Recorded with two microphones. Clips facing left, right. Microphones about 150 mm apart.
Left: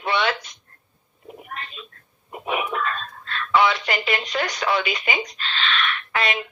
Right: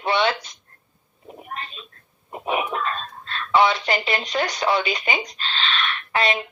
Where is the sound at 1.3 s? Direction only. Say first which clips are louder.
Right 1 dB; 35° right (ahead or behind).